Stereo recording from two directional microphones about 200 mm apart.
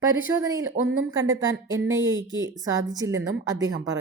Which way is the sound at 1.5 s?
70° right (ahead or behind).